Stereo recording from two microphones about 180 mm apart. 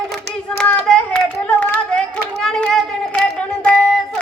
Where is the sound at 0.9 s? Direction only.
5° left (ahead or behind).